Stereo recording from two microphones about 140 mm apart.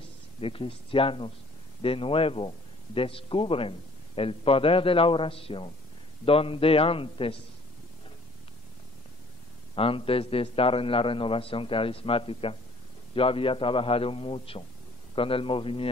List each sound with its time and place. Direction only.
0.4 s speech: 40° left (ahead or behind)
9.8 s speech: 40° left (ahead or behind)